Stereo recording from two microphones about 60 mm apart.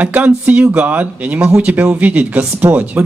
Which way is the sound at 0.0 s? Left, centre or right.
Right.